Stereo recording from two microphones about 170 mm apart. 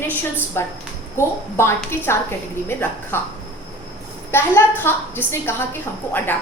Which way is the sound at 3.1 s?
10° left (ahead or behind).